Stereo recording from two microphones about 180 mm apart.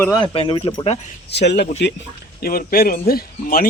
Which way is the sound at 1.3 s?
70° left (ahead or behind).